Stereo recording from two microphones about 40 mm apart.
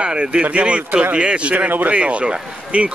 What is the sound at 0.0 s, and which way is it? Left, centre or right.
Speech, right.